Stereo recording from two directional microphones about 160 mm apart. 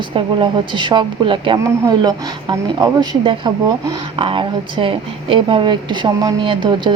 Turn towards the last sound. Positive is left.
turn(degrees=-30)  # may be behind; listen again after turning